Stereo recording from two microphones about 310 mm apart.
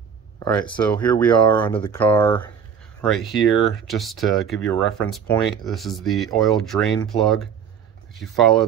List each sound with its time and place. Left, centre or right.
0.4 s speech: centre
1.7 s speech: centre